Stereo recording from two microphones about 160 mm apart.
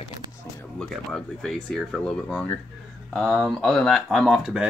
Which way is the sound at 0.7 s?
5° left (ahead or behind).